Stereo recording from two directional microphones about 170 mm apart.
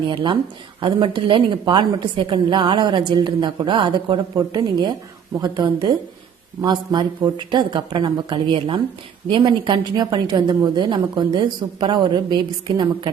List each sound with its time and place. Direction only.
0.1 s a woman's voice: 25° right (ahead or behind)